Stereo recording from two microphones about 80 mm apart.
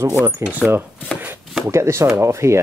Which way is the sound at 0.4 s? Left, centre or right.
Right.